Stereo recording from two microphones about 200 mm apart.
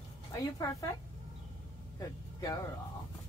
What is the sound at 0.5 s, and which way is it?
Speech, 15° left (ahead or behind).